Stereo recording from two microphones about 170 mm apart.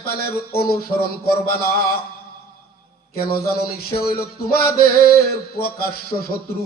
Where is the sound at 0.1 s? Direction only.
60° left (ahead or behind).